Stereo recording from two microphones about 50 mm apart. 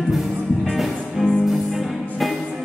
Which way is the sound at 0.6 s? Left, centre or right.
Centre.